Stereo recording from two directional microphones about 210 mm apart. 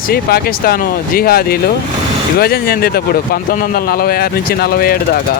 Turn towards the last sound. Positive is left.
turn(degrees=45)  # may be behind; listen again after turning